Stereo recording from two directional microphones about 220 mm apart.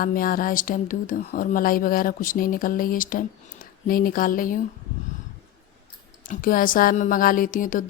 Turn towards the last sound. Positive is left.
turn(degrees=40)  # may be behind; listen again after turning